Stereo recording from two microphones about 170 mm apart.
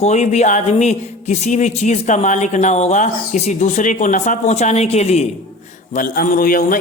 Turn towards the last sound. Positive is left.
turn(degrees=55)  # may be behind; listen again after turning